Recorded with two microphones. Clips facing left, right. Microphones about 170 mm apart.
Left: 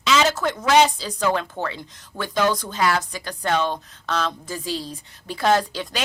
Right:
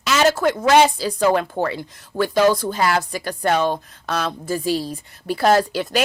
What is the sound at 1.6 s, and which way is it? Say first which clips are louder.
Speech: right 6 dB; 45° right (ahead or behind).